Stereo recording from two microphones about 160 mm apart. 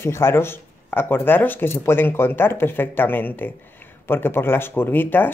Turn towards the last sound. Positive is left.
turn(degrees=10)  # may be behind; listen again after turning